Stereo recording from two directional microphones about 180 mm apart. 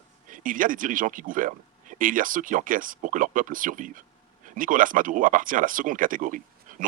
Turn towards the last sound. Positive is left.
turn(degrees=-45)  # may be behind; listen again after turning